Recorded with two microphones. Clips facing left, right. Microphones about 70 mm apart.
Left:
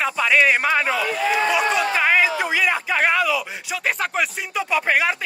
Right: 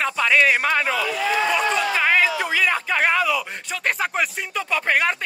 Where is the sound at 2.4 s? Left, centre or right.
Centre.